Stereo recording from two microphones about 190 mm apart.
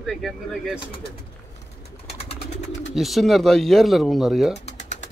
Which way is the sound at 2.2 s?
30° left (ahead or behind).